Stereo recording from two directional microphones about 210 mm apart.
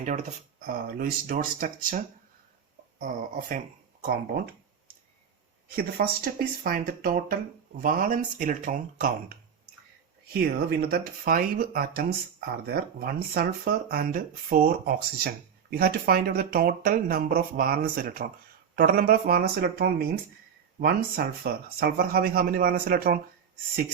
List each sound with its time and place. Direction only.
0.0 s speech: 35° right (ahead or behind)
5.7 s speech: 45° right (ahead or behind)
10.3 s speech: 45° right (ahead or behind)